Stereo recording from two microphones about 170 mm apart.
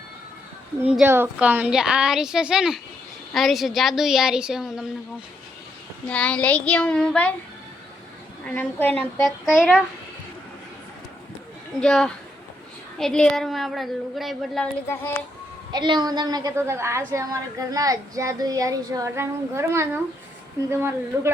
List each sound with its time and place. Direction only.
0.8 s a woman's voice: 10° right (ahead or behind)
6.1 s child singing: 5° left (ahead or behind)
8.4 s child singing: 10° left (ahead or behind)
11.8 s a woman's voice: 5° left (ahead or behind)
15.7 s a woman's voice: 25° right (ahead or behind)